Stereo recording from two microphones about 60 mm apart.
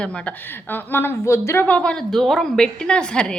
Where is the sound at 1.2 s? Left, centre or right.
Left.